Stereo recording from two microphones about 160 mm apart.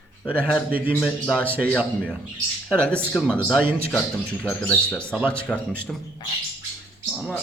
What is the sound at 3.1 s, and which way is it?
Speech, 5° left (ahead or behind).